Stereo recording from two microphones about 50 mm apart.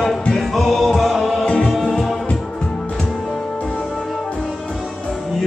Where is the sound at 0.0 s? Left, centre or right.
Centre.